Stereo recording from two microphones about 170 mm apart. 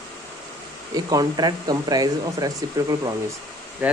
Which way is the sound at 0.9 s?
25° right (ahead or behind).